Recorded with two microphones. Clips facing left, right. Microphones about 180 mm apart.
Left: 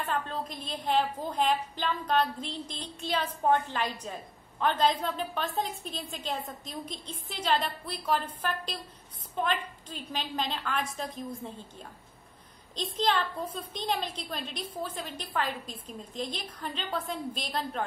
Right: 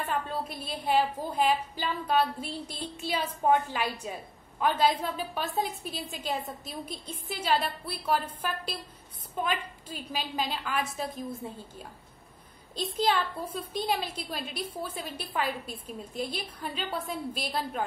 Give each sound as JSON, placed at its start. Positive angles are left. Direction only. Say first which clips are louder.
{"t": 0.0, "sound": "a woman's voice", "louder": "right 1 dB", "side_deg": -10}
{"t": 12.7, "sound": "a woman's voice", "louder": "right 1 dB", "side_deg": -10}